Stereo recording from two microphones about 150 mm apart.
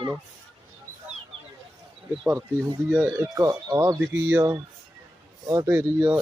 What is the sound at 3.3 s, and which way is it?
Speech, 20° right (ahead or behind).